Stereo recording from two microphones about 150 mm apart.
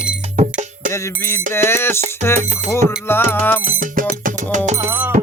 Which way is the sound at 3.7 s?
65° right (ahead or behind).